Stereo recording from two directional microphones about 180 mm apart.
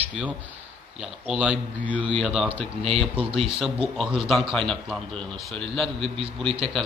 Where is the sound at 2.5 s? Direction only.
30° right (ahead or behind).